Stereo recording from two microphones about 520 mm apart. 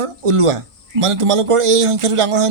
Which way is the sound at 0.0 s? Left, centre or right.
Right.